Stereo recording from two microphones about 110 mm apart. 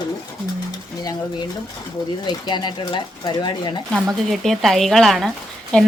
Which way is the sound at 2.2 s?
45° left (ahead or behind).